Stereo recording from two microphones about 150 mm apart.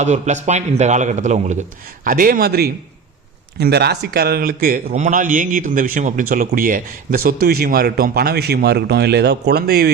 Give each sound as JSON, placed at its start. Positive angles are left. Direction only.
{"t": 0.0, "sound": "a man's voice", "side_deg": -50}
{"t": 2.0, "sound": "a man's voice", "side_deg": -70}
{"t": 4.9, "sound": "a man's voice", "side_deg": -55}